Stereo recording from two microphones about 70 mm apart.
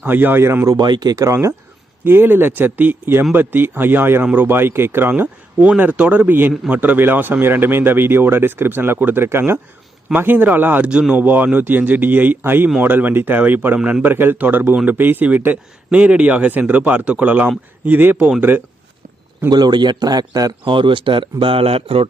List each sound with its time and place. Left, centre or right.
0.1 s speech: right
0.8 s a man's voice: right
1.1 s speech: right
2.0 s speech: right
10.8 s speech: centre
11.2 s speech: right
19.5 s a man's voice: right